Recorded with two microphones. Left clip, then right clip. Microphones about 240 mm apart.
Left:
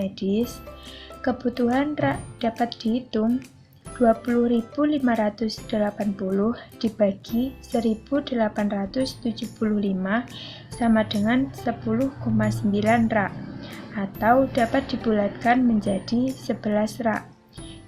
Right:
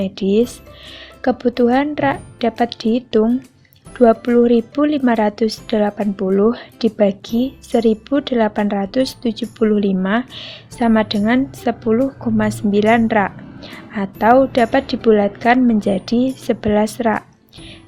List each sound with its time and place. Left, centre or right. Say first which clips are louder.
0.0 s a woman's voice: right 10 dB; right